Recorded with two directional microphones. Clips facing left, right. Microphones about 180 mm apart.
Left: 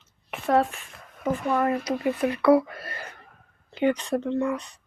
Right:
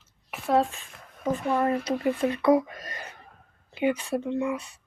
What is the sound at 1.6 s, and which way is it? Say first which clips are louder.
Speech: even; 30° right (ahead or behind).